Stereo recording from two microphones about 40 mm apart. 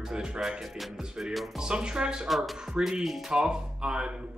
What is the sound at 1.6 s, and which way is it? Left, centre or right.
Speech, right.